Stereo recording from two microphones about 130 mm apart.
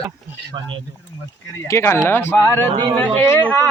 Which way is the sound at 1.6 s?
20° left (ahead or behind).